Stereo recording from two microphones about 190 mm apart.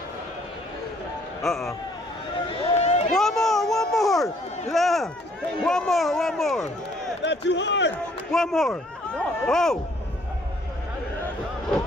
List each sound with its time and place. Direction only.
1.4 s speech: centre (ahead or behind)
2.3 s a sound: 35° left (ahead or behind)
3.1 s run: centre (ahead or behind)
4.6 s speech: centre (ahead or behind)
7.2 s a man's voice: 70° left (ahead or behind)
8.3 s speech: centre (ahead or behind)